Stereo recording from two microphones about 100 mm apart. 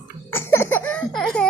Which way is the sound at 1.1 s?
5° left (ahead or behind).